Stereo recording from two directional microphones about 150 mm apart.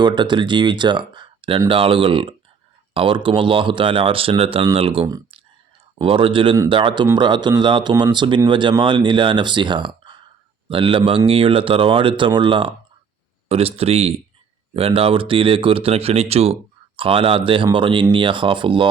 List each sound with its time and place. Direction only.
0.0 s speech: 30° right (ahead or behind)